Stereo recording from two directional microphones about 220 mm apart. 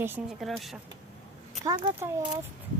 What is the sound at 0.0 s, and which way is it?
Speech, 10° right (ahead or behind).